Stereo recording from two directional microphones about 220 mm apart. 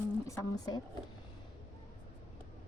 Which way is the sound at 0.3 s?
15° left (ahead or behind).